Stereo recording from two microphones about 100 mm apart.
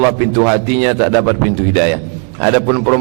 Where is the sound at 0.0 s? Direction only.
20° right (ahead or behind).